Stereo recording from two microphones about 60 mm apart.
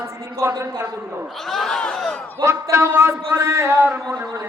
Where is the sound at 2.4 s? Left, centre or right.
Right.